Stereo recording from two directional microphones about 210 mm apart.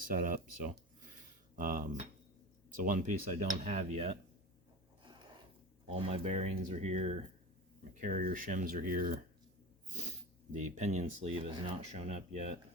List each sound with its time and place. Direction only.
0.0 s speech: 40° right (ahead or behind)
5.0 s a sound: 20° right (ahead or behind)
5.9 s speech: 30° right (ahead or behind)
8.0 s speech: 40° right (ahead or behind)
10.5 s speech: 35° right (ahead or behind)